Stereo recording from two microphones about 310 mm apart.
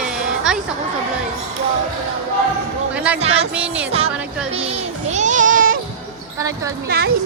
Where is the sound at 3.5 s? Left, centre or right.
Centre.